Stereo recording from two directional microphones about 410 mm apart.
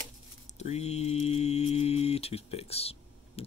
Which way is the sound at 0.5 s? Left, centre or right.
Centre.